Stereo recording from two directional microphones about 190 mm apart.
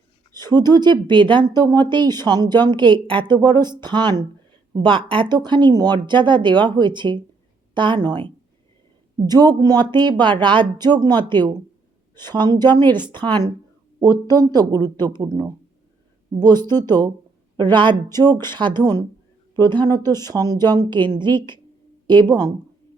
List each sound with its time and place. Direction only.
0.3 s a woman's voice: 20° right (ahead or behind)